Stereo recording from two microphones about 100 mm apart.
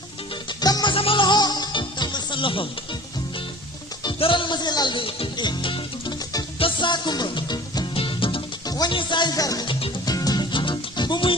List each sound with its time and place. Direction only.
0.4 s music: 45° left (ahead or behind)
0.9 s music: 70° left (ahead or behind)
1.2 s music: 45° left (ahead or behind); by 5.3 s 65° left (ahead or behind)
5.4 s music: 55° left (ahead or behind)
7.9 s music: 60° left (ahead or behind)
8.6 s music: 40° left (ahead or behind)
8.9 s speech: 55° left (ahead or behind); by 9.6 s 40° left (ahead or behind)
10.1 s music: 40° left (ahead or behind)
10.5 s music: 55° left (ahead or behind)